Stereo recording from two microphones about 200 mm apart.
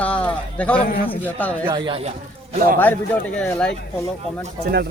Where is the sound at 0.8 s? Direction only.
45° left (ahead or behind).